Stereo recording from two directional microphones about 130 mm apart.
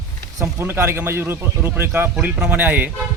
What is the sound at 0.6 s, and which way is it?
Speech, 20° right (ahead or behind).